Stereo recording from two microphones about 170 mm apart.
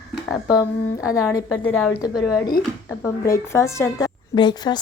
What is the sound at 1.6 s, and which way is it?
A woman's voice, 10° left (ahead or behind).